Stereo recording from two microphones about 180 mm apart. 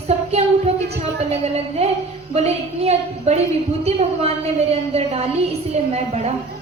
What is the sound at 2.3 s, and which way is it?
A woman's voice, 35° right (ahead or behind).